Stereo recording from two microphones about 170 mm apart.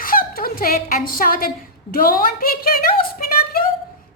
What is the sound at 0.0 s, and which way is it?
A woman's voice, 55° left (ahead or behind).